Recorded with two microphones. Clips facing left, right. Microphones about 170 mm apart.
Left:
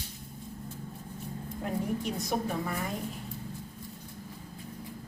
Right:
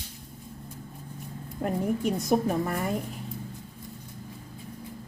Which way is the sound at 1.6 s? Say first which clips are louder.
Right 5 dB; 50° right (ahead or behind).